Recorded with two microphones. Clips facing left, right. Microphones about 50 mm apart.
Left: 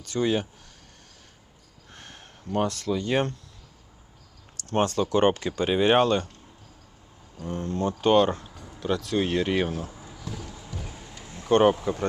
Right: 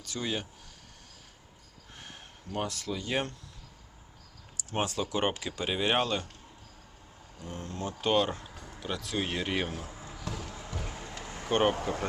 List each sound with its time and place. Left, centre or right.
0.1 s speech: centre
2.0 s a sound: centre
2.6 s speech: centre
4.5 s speech: centre
7.4 s speech: centre
10.5 s music: right
11.1 s a sound: right
11.4 s speech: centre